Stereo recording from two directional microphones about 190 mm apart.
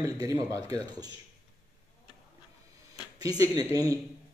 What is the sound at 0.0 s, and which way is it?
Speech, 15° right (ahead or behind).